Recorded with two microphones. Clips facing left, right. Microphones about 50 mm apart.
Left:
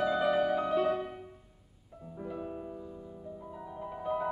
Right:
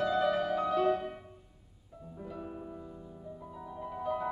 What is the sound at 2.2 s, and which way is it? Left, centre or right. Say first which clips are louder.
Music: left 3 dB; centre.